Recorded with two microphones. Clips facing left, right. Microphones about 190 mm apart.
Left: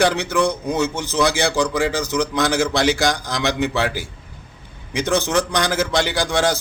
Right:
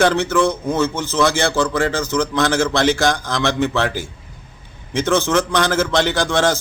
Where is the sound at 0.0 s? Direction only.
15° left (ahead or behind).